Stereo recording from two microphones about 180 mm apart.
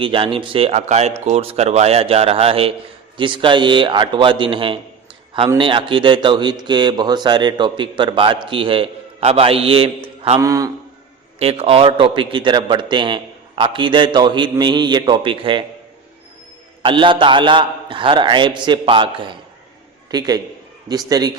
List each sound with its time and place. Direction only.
0.0 s speech: 30° right (ahead or behind)
10.4 s a man's voice: 15° right (ahead or behind)
11.3 s speech: 35° right (ahead or behind)
16.8 s a man's voice: 30° right (ahead or behind)